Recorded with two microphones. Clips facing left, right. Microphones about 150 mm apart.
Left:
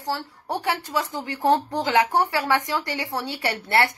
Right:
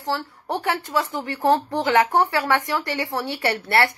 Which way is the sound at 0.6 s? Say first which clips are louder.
Right 2 dB; 15° left (ahead or behind).